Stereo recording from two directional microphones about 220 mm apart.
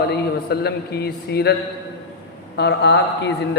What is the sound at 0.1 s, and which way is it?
A man's voice, 45° left (ahead or behind).